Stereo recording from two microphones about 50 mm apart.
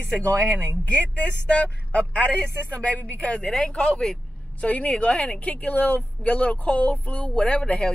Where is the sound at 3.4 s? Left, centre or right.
Centre.